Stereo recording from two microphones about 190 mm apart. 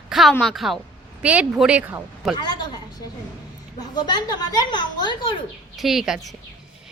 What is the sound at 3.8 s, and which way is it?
A woman's voice, 20° left (ahead or behind).